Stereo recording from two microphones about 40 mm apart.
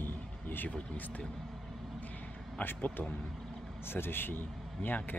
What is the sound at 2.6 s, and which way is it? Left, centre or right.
Speech, left.